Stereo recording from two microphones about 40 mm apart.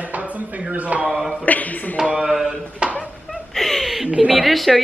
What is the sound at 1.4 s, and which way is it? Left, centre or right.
Speech, left.